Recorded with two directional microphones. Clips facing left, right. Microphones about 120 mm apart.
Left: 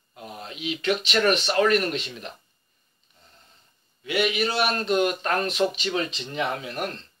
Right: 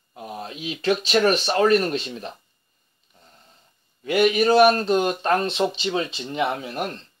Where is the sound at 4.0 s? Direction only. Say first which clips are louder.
Right 6 dB; 45° right (ahead or behind); by 6.9 s 25° right (ahead or behind).